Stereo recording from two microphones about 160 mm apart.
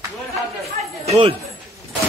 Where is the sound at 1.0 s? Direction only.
40° right (ahead or behind).